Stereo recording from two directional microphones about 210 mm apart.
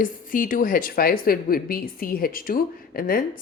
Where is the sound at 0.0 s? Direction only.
40° left (ahead or behind).